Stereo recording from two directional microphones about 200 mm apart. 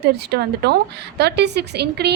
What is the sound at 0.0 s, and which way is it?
A woman's voice, 55° right (ahead or behind).